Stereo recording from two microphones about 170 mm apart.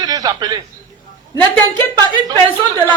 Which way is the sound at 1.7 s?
10° left (ahead or behind).